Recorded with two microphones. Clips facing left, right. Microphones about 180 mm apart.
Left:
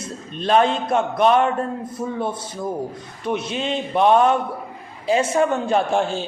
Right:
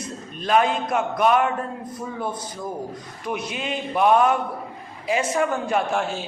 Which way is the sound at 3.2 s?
25° left (ahead or behind).